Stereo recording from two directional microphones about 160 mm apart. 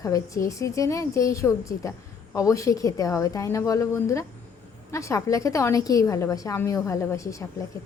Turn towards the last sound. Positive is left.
turn(degrees=20)  # may be behind; listen again after turning